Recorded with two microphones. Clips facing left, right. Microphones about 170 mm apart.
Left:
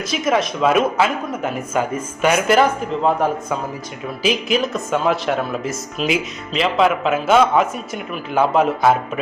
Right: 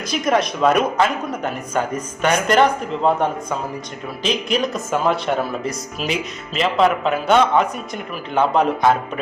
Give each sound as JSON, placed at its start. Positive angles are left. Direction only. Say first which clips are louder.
{"t": 0.1, "sound": "speech", "louder": "right 1 dB", "side_deg": 0}